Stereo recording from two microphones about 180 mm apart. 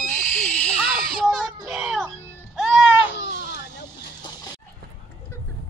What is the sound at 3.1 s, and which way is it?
Baby cry, 70° left (ahead or behind).